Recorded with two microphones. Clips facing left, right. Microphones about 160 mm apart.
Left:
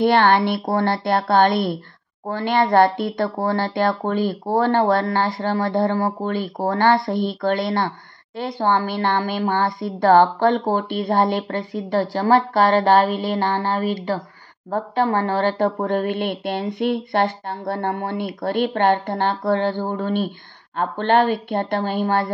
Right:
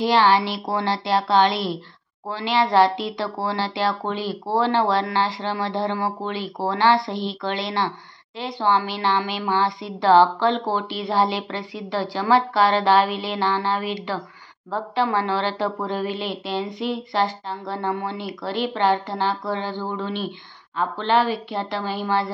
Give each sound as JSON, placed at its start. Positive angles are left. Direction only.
{"t": 0.0, "sound": "speech", "side_deg": 55}